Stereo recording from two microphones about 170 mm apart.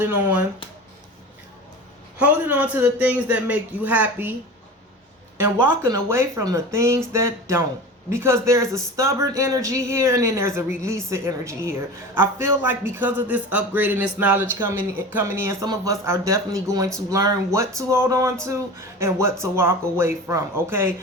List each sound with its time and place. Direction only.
0.0 s a woman's voice: 10° right (ahead or behind)
2.1 s a woman's voice: 10° right (ahead or behind)
5.4 s a woman's voice: 15° right (ahead or behind)